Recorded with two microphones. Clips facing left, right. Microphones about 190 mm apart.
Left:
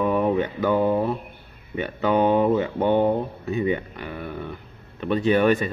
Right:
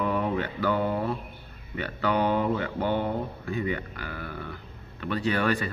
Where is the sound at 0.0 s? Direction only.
20° left (ahead or behind).